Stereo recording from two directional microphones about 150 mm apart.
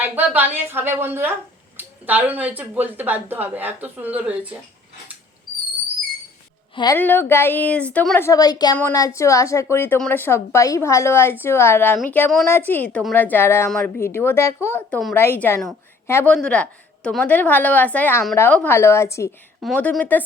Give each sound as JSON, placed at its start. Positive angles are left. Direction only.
{"t": 0.0, "sound": "a woman's voice", "side_deg": -10}
{"t": 6.9, "sound": "a woman's voice", "side_deg": 15}
{"t": 16.3, "sound": "a woman's voice", "side_deg": 5}
{"t": 19.6, "sound": "a woman's voice", "side_deg": 5}